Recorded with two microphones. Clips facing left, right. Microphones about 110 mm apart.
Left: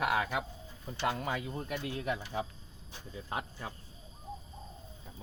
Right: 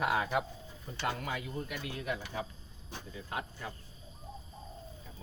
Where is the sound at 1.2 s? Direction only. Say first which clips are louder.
Left 2 dB; 35° left (ahead or behind).